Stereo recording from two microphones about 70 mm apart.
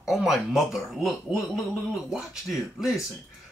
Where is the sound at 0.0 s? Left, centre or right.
Centre.